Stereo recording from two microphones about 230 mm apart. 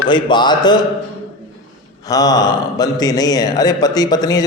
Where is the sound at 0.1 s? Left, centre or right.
Centre.